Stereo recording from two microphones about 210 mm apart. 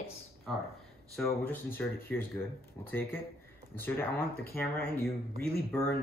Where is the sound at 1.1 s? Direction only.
5° left (ahead or behind).